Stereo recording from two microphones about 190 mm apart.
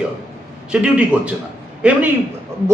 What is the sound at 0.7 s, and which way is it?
A man's voice, 5° right (ahead or behind).